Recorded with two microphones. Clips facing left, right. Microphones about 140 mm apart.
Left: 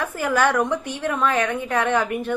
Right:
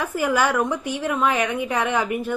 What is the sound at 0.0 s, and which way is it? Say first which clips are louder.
A woman's voice: even; 10° right (ahead or behind).